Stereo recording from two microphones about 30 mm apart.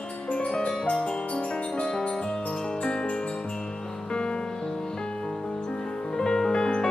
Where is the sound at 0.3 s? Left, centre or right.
Left.